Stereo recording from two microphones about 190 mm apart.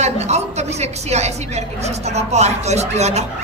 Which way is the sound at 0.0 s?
35° right (ahead or behind).